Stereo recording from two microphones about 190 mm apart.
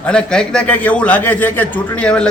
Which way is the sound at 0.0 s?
5° left (ahead or behind).